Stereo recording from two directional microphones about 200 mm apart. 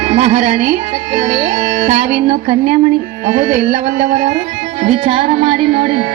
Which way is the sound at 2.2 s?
30° right (ahead or behind).